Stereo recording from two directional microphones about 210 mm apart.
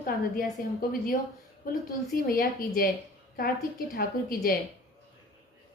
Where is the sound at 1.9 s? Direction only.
40° left (ahead or behind).